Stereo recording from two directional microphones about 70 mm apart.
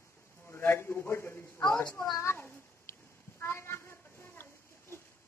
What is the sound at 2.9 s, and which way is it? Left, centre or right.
Cat, left.